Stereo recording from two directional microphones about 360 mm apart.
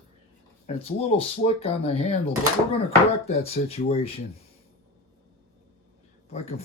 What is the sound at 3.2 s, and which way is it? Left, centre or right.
Speech, centre.